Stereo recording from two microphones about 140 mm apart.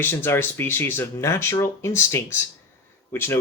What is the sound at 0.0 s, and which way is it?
Speech, 15° left (ahead or behind).